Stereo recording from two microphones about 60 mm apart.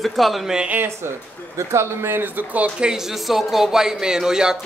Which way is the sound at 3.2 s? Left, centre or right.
Centre.